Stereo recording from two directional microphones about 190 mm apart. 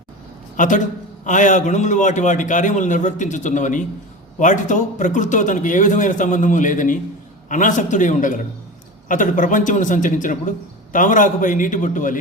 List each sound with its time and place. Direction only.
0.5 s a man's voice: 40° left (ahead or behind)